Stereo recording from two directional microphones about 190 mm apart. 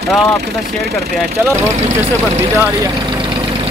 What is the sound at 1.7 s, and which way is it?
Speech, 35° right (ahead or behind).